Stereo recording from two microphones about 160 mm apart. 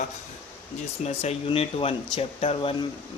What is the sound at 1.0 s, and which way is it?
Speech, 40° left (ahead or behind).